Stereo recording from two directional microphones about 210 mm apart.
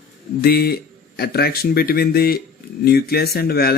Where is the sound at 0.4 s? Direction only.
45° left (ahead or behind).